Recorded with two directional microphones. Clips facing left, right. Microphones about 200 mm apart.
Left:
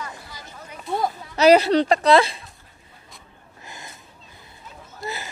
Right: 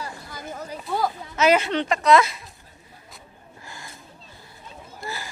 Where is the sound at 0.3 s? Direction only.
50° right (ahead or behind).